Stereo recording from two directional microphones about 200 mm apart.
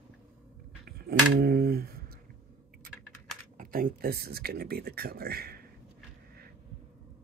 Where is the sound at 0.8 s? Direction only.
50° right (ahead or behind).